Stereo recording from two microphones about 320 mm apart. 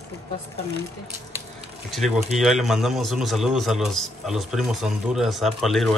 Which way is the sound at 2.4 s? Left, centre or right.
Centre.